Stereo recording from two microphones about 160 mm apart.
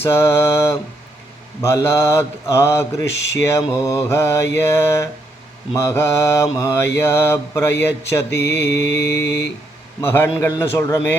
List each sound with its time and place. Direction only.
0.0 s mantra: 15° left (ahead or behind)